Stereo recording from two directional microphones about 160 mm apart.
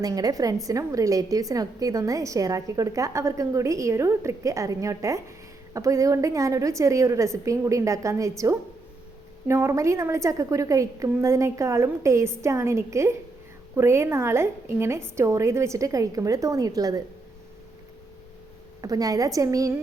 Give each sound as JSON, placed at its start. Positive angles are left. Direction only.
{"t": 0.0, "sound": "a woman's voice", "side_deg": -25}
{"t": 18.8, "sound": "a woman's voice", "side_deg": -20}